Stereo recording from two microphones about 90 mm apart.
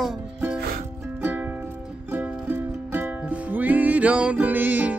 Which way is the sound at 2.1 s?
20° right (ahead or behind).